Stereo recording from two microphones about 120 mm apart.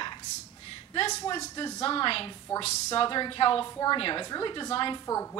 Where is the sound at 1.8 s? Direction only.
50° left (ahead or behind).